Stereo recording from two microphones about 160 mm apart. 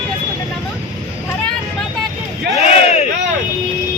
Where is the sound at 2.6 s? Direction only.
40° left (ahead or behind).